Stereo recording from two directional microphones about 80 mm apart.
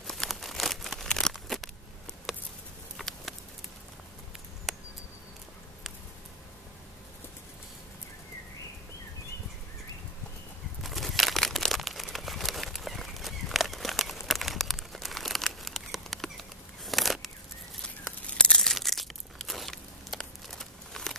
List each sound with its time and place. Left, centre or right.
0.0 s crumpling: centre
1.3 s a sound: centre
2.3 s patter: centre
3.0 s a sound: centre
4.7 s cricket: centre
10.8 s crumpling: centre
18.2 s crunch: centre